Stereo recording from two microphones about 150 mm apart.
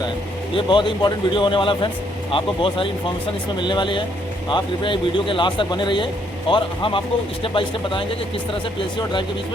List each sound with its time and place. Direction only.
0.5 s speech: 35° left (ahead or behind)